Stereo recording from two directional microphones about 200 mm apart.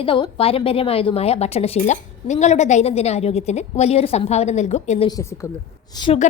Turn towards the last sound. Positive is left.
turn(degrees=25)  # may be behind; listen again after turning